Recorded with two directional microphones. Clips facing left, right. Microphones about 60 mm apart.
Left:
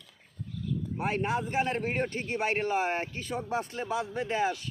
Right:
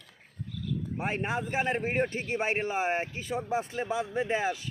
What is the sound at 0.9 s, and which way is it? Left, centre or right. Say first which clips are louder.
Speech: left 2 dB; right.